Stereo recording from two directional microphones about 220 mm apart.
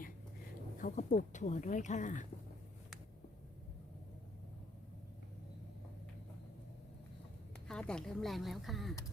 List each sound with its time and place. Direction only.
0.8 s speech: 40° left (ahead or behind)
7.7 s speech: 5° left (ahead or behind)